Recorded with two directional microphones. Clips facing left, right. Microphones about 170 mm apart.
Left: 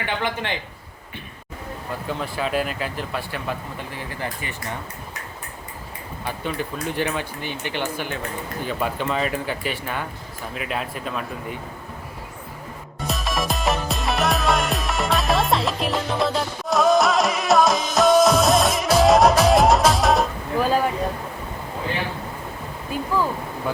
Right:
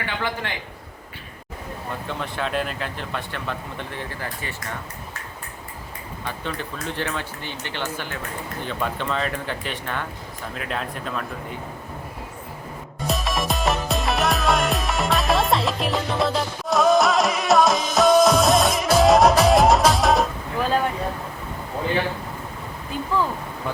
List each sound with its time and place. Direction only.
0.0 s a man's voice: 20° left (ahead or behind)
2.0 s speech: 5° left (ahead or behind)
6.2 s speech: 10° left (ahead or behind)
13.1 s music: centre (ahead or behind)
22.9 s speech: 10° left (ahead or behind)